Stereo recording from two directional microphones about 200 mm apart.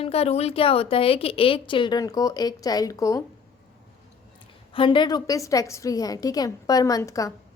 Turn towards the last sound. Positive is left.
turn(degrees=15)  # may be behind; listen again after turning